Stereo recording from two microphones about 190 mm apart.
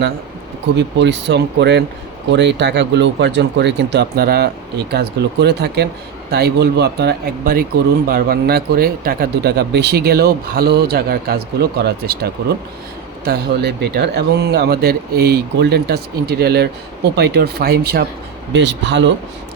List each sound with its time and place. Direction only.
0.8 s speech: 65° right (ahead or behind)
18.5 s speech: 70° right (ahead or behind)